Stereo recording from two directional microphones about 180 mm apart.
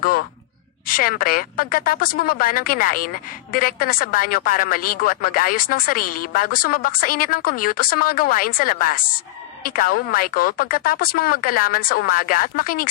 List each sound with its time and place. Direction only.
0.0 s speech: 55° left (ahead or behind)